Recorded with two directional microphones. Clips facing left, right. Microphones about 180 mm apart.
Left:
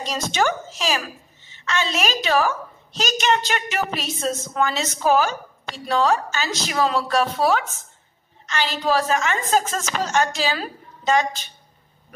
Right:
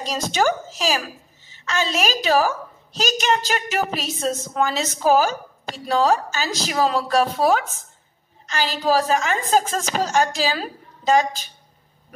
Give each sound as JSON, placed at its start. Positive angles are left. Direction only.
{"t": 0.0, "sound": "a woman's voice", "side_deg": -40}